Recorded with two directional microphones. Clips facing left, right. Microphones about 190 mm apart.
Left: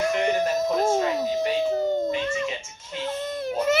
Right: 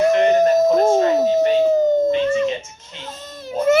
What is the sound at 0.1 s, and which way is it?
Doorbell, 45° right (ahead or behind).